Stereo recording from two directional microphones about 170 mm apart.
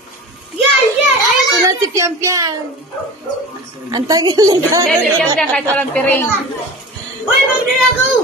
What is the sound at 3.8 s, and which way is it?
Speech, 20° right (ahead or behind).